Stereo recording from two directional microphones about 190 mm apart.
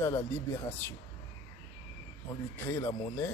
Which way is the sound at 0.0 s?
15° left (ahead or behind).